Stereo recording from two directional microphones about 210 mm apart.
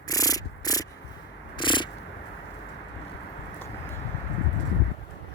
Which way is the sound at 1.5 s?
20° left (ahead or behind).